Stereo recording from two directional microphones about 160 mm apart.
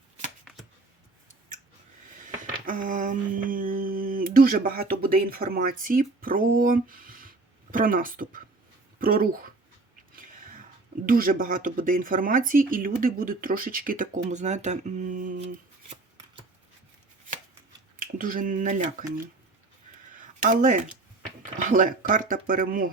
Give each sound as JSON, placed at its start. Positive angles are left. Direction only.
{"t": 2.1, "sound": "a sound", "side_deg": -55}
{"t": 9.0, "sound": "speech", "side_deg": -60}
{"t": 10.2, "sound": "a sound", "side_deg": -60}
{"t": 11.0, "sound": "speech", "side_deg": -60}
{"t": 18.0, "sound": "speech", "side_deg": -60}
{"t": 20.2, "sound": "speech", "side_deg": -55}